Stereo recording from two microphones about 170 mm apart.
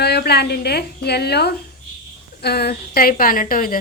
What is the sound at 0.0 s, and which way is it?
A woman's voice, 70° left (ahead or behind).